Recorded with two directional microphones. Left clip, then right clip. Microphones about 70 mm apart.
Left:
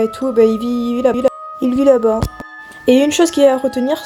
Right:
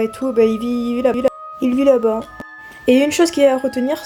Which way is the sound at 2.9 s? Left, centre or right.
Left.